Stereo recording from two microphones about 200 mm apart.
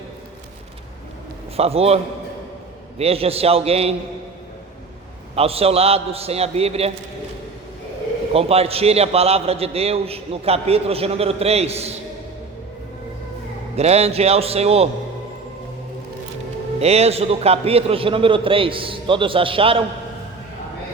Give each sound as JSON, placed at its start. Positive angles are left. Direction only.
{"t": 1.5, "sound": "a man's voice", "side_deg": -30}
{"t": 3.0, "sound": "a man's voice", "side_deg": -30}
{"t": 5.3, "sound": "a man's voice", "side_deg": -30}
{"t": 8.3, "sound": "a man's voice", "side_deg": -30}
{"t": 13.7, "sound": "a man's voice", "side_deg": -30}
{"t": 16.8, "sound": "a man's voice", "side_deg": -30}